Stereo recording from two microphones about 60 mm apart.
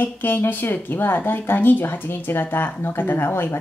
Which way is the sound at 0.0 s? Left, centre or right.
Left.